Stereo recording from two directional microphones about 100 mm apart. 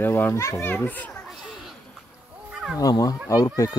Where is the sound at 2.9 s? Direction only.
35° left (ahead or behind).